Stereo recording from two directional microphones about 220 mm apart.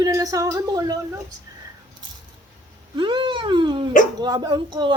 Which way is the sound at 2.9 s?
20° right (ahead or behind).